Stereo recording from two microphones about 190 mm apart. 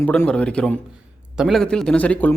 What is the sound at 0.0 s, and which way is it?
A man's voice, 10° left (ahead or behind).